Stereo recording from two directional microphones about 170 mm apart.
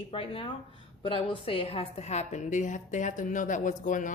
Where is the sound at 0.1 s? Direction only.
35° left (ahead or behind).